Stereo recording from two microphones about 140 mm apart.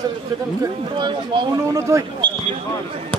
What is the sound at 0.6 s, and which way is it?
Speech, 35° right (ahead or behind).